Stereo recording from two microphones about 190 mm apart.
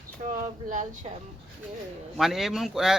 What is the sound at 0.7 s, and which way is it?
Speech, 40° right (ahead or behind).